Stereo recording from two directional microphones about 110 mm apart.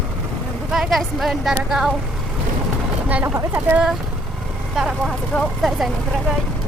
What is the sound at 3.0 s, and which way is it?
Speech, 15° right (ahead or behind).